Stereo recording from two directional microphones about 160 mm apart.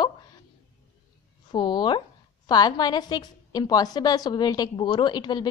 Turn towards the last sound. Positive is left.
turn(degrees=25)  # may be behind; listen again after turning